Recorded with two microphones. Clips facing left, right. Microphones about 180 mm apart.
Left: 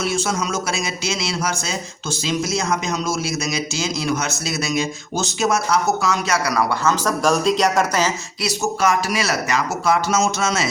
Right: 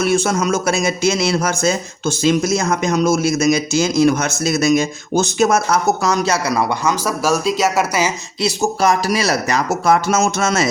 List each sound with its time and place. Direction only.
0.0 s speech: 55° right (ahead or behind); by 8.1 s 10° right (ahead or behind)
8.4 s speech: 30° right (ahead or behind); by 10.7 s 50° right (ahead or behind)